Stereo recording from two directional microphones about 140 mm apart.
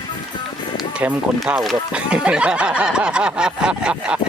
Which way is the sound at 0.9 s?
10° right (ahead or behind).